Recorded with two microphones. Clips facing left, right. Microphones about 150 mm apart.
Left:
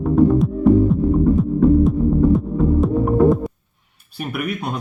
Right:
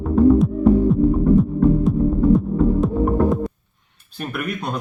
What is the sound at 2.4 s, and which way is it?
Music, centre (ahead or behind).